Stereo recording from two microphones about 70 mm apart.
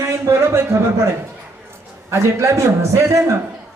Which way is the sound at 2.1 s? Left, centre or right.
Right.